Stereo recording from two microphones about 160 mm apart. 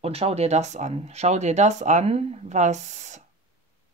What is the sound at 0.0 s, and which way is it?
Speech, 40° right (ahead or behind).